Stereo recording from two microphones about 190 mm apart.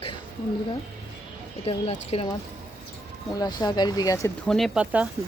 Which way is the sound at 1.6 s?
35° left (ahead or behind).